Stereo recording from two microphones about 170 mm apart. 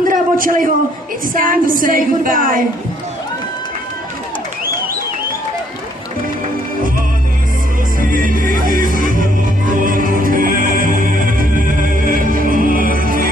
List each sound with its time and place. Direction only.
0.1 s a sound: 55° right (ahead or behind)
1.3 s a woman's voice: 55° right (ahead or behind)
8.0 s music: 55° right (ahead or behind)